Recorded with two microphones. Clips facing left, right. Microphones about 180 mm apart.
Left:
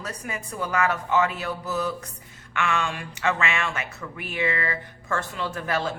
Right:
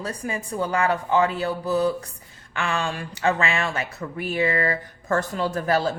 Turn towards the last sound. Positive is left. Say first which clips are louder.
# right 5 dB
turn(degrees=-35)  # may be behind; listen again after turning